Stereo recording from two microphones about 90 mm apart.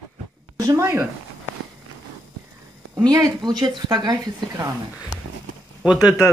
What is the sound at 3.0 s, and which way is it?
Speech, 45° right (ahead or behind).